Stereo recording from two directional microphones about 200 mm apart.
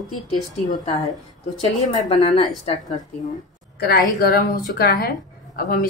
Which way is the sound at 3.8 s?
50° left (ahead or behind).